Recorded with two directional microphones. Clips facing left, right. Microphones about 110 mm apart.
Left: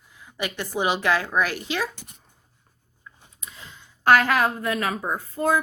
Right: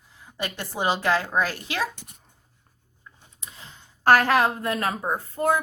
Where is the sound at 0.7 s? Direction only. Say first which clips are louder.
Even; 30° right (ahead or behind).